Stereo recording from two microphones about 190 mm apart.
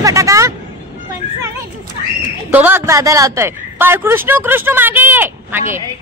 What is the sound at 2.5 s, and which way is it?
A man's voice, 10° right (ahead or behind).